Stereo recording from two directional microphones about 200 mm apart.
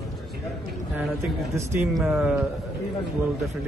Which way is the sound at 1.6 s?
15° right (ahead or behind).